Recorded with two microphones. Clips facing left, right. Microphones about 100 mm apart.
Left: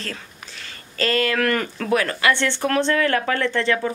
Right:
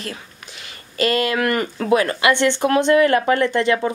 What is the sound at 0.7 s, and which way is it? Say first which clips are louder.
Speech: right 3 dB; 15° right (ahead or behind).